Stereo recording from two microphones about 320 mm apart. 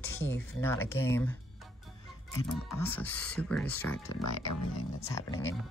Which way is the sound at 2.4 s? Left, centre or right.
Centre.